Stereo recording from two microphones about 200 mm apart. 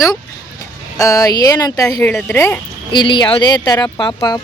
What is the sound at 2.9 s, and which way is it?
A woman's voice, 25° left (ahead or behind).